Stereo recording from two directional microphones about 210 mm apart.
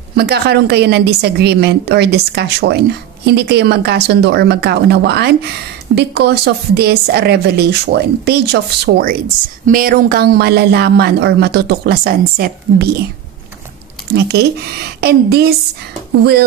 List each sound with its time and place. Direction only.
0.1 s speech: 50° right (ahead or behind)
14.1 s speech: 50° right (ahead or behind)